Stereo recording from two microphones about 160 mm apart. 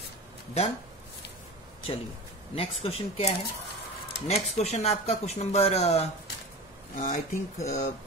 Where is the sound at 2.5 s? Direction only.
35° left (ahead or behind).